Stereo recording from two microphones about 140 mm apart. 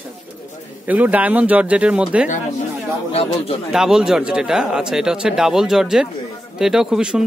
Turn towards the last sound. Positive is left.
turn(degrees=-5)  # may be behind; listen again after turning